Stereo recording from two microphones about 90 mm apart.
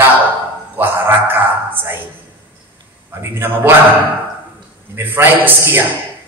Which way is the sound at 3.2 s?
25° right (ahead or behind).